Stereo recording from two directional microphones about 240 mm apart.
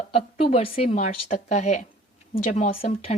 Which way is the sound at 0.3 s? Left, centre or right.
Left.